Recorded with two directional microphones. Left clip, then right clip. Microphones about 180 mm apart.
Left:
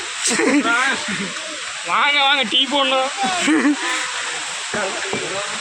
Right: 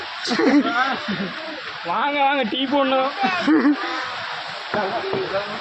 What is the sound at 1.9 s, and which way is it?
Speech, 35° right (ahead or behind).